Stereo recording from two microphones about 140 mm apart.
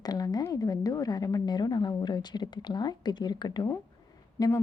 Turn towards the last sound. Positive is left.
turn(degrees=30)  # may be behind; listen again after turning